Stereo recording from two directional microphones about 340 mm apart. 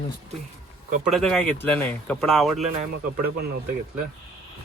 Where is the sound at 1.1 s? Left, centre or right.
Centre.